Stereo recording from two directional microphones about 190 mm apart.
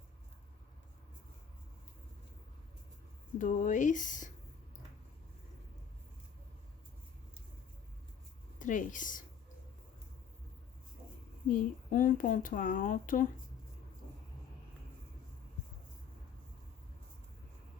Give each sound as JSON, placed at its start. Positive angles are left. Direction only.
{"t": 3.3, "sound": "speech", "side_deg": 40}
{"t": 8.5, "sound": "a woman's voice", "side_deg": 45}
{"t": 11.5, "sound": "speech", "side_deg": 45}